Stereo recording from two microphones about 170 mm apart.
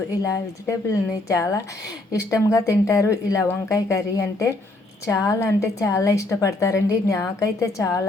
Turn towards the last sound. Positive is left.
turn(degrees=20)  # may be behind; listen again after turning